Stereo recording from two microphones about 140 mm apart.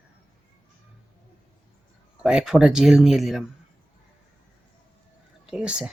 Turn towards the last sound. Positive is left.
turn(degrees=-5)  # may be behind; listen again after turning